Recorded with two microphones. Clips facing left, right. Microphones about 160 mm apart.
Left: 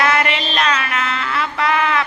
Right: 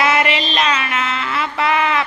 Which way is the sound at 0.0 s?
5° right (ahead or behind).